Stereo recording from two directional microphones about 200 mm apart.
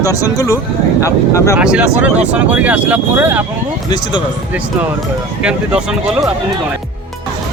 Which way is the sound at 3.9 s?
20° left (ahead or behind).